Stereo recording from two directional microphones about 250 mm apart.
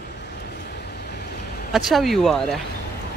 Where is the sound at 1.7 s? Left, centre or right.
Centre.